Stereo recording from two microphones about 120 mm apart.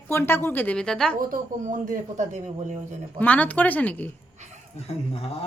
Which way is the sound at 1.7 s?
90° right.